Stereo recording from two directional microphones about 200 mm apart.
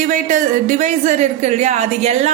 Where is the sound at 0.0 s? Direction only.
40° right (ahead or behind).